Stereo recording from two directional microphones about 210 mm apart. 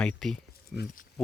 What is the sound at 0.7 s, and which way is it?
Speech, 50° left (ahead or behind).